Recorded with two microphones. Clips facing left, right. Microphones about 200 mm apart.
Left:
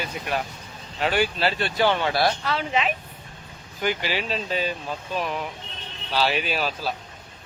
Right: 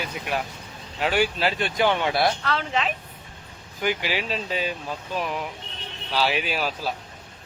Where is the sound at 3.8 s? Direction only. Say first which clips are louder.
Even; 10° right (ahead or behind).